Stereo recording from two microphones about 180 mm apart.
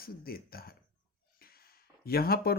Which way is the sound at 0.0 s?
55° left (ahead or behind).